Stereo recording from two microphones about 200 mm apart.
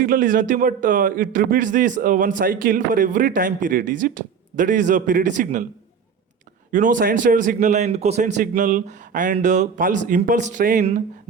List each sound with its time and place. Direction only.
0.0 s a man's voice: 45° right (ahead or behind)
6.7 s a man's voice: 40° right (ahead or behind)